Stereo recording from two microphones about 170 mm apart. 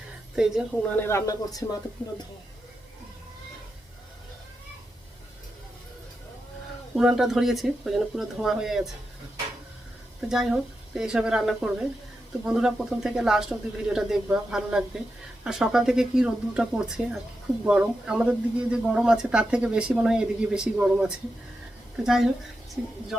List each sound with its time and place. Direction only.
0.3 s speech: 5° right (ahead or behind)
0.9 s speech: 15° left (ahead or behind)
6.9 s speech: centre (ahead or behind)
10.2 s speech: 5° right (ahead or behind)